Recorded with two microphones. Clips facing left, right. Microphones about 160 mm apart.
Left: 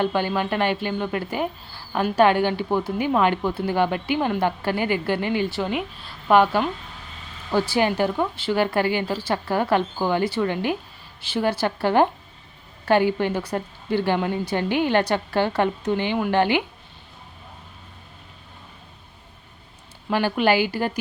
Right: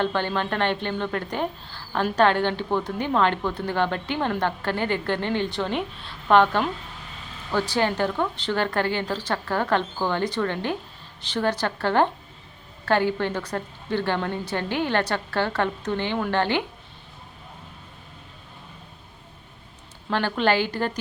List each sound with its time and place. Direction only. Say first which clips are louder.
0.0 s a woman's voice: left 2 dB; 10° left (ahead or behind)
20.1 s a woman's voice: left 2 dB; 10° left (ahead or behind)